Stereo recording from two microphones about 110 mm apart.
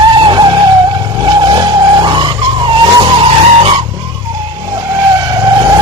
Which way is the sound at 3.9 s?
45° right (ahead or behind).